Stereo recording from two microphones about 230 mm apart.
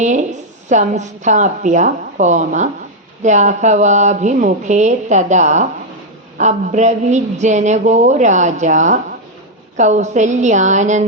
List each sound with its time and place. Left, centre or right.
0.0 s a woman's voice: right